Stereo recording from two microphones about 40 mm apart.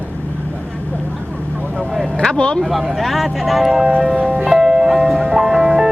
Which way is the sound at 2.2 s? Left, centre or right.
Left.